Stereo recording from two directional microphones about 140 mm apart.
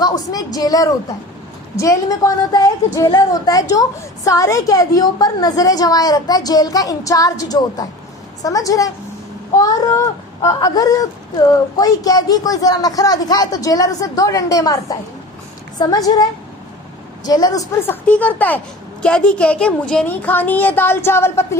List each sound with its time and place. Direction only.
0.0 s a woman's voice: 30° left (ahead or behind)